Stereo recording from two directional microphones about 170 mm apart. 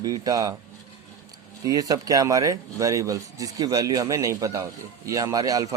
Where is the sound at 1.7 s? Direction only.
20° right (ahead or behind).